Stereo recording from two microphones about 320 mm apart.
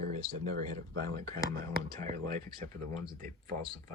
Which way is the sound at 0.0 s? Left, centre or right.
Right.